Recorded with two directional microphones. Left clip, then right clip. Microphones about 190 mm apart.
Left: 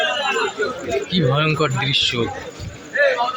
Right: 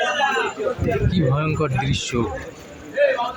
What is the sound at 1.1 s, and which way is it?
Speech, centre (ahead or behind).